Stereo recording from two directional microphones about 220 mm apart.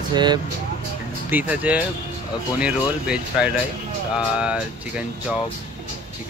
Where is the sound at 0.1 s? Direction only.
20° right (ahead or behind).